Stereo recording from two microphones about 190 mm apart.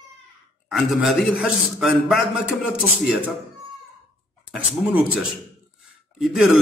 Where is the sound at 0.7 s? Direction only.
Centre (ahead or behind).